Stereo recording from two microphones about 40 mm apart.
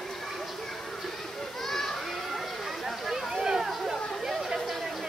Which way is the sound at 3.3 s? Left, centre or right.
Centre.